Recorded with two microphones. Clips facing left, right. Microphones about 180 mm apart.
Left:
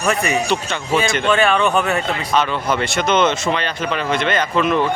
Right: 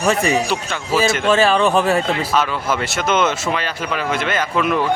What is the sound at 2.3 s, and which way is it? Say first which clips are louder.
Speech: left 4 dB; 5° right (ahead or behind).